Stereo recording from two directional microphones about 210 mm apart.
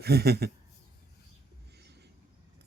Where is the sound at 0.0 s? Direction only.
50° right (ahead or behind).